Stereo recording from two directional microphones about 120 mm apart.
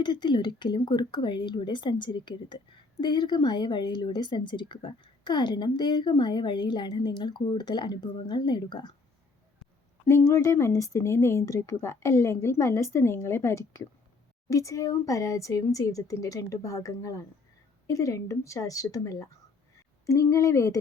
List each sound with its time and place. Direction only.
0.0 s speech: 40° left (ahead or behind)
10.1 s speech: 20° left (ahead or behind)